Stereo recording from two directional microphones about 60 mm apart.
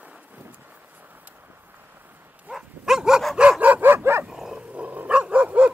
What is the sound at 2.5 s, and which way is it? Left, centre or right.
Dog, centre.